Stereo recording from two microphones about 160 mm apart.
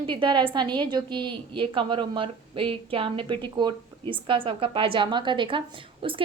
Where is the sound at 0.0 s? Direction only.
30° right (ahead or behind).